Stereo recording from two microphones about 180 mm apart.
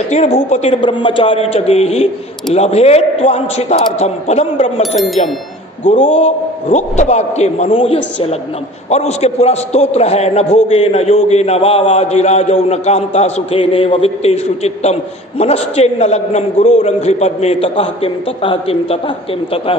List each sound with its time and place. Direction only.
0.1 s a man's voice: 40° left (ahead or behind)
4.9 s speech: centre (ahead or behind)
5.9 s a man's voice: 35° left (ahead or behind)